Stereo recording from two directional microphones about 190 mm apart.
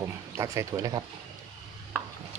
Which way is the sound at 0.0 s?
15° right (ahead or behind).